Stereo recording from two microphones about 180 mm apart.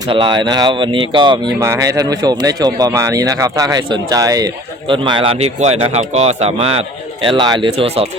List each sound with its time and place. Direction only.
0.1 s speech: 25° right (ahead or behind)
1.5 s a man's voice: 15° right (ahead or behind)